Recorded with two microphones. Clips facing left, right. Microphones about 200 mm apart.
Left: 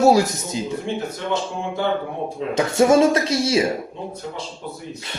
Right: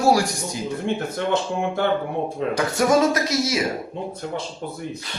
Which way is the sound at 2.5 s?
25° left (ahead or behind).